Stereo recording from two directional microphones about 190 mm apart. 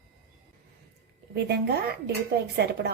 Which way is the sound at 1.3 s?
60° right (ahead or behind).